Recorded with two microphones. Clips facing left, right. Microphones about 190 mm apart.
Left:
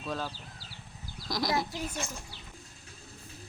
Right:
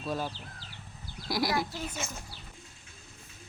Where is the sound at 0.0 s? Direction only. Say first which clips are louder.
Right 2 dB; 10° right (ahead or behind).